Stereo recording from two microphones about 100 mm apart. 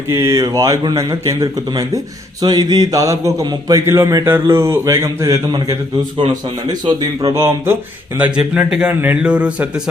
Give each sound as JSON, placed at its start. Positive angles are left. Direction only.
{"t": 0.1, "sound": "speech", "side_deg": -35}
{"t": 6.7, "sound": "speech", "side_deg": -45}
{"t": 7.3, "sound": "speech", "side_deg": -25}
{"t": 8.2, "sound": "a man's voice", "side_deg": -5}